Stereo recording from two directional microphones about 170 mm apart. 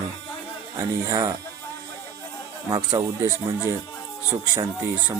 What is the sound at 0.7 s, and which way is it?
Speech, 20° right (ahead or behind).